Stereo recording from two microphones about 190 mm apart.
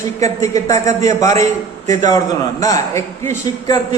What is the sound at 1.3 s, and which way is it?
Speech, 40° right (ahead or behind).